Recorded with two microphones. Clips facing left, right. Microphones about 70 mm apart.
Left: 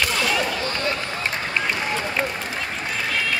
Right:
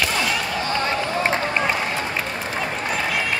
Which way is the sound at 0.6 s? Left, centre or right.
Right.